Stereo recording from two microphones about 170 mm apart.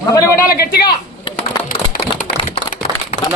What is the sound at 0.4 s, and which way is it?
Speech, 65° left (ahead or behind).